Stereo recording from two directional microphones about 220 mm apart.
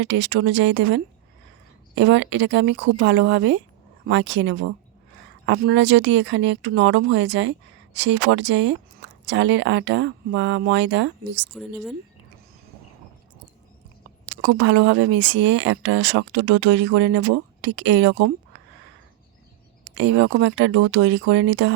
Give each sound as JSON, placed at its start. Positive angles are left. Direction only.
{"t": 0.0, "sound": "speech", "side_deg": -55}
{"t": 11.5, "sound": "speech", "side_deg": 0}
{"t": 14.3, "sound": "speech", "side_deg": -55}
{"t": 19.8, "sound": "speech", "side_deg": -55}